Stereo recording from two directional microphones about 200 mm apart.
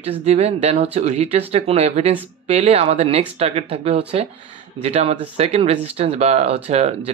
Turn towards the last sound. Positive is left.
turn(degrees=-35)  # may be behind; listen again after turning